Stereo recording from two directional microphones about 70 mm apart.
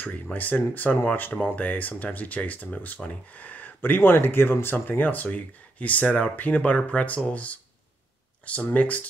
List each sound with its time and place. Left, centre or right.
0.0 s speech: left